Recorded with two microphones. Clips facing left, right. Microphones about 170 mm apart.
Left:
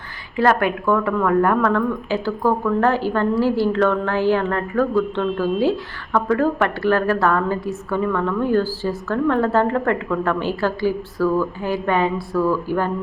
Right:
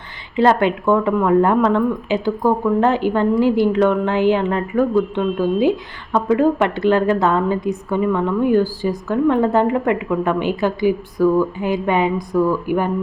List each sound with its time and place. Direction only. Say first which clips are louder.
0.3 s a woman's voice: right 3 dB; 25° right (ahead or behind)